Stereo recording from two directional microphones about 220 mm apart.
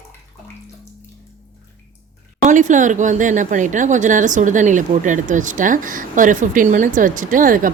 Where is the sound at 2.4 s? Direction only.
35° right (ahead or behind).